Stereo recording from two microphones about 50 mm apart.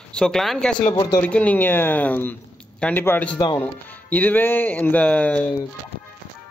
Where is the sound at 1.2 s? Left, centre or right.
Left.